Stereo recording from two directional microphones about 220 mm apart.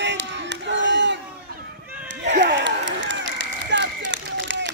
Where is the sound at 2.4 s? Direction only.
55° right (ahead or behind).